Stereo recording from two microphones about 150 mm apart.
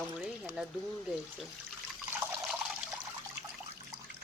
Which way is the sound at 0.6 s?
5° right (ahead or behind).